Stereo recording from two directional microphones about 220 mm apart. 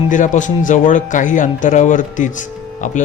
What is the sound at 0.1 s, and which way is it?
A man's voice, 35° left (ahead or behind).